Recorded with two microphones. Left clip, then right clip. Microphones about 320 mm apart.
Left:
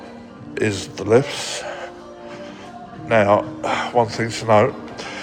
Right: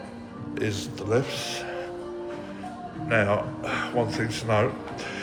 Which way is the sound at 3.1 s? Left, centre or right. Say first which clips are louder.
Left 8 dB; centre.